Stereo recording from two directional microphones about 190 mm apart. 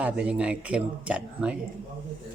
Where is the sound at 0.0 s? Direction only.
5° right (ahead or behind).